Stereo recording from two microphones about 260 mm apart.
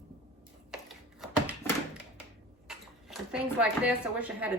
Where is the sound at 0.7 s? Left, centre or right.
Centre.